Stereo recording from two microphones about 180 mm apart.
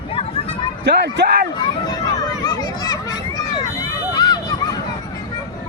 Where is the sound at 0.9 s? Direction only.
70° right (ahead or behind).